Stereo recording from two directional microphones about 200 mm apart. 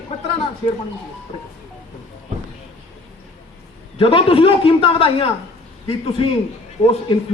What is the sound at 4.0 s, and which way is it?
A man's voice, 25° left (ahead or behind).